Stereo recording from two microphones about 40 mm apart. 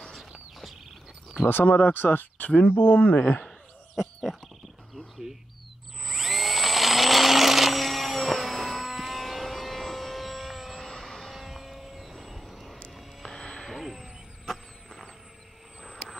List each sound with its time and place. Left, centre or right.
1.4 s speech: left
2.7 s speech: left
3.0 s speech: left
6.0 s dental drill: centre
10.9 s vehicle: centre
11.3 s vehicle: centre
12.9 s music: centre
13.7 s a sound: centre
14.4 s vehicle: centre